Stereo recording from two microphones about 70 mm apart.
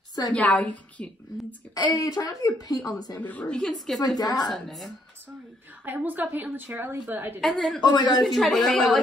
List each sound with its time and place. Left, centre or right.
0.3 s a woman's voice: left
1.8 s a woman's voice: left
3.2 s a woman's voice: left
3.7 s a woman's voice: centre
4.2 s a woman's voice: left
4.5 s a woman's voice: centre
5.9 s a woman's voice: right
7.3 s a woman's voice: centre
7.8 s a woman's voice: left
8.2 s a woman's voice: centre